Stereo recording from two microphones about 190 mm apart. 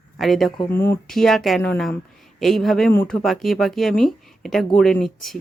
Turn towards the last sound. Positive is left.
turn(degrees=0)  # may be behind; listen again after turning